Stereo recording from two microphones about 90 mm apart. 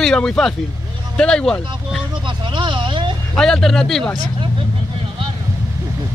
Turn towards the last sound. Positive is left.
turn(degrees=5)  # may be behind; listen again after turning